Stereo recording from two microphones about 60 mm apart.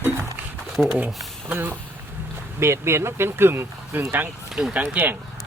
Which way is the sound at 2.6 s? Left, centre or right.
Right.